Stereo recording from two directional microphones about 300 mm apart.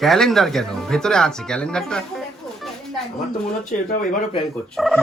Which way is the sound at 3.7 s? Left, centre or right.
Left.